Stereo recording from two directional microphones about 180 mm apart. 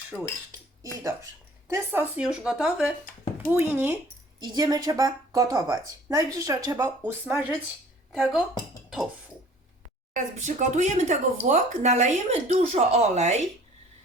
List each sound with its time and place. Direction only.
0.1 s speech: centre (ahead or behind)
1.6 s speech: 15° right (ahead or behind)
4.4 s speech: 25° right (ahead or behind)
8.1 s speech: centre (ahead or behind)
10.2 s speech: 40° right (ahead or behind)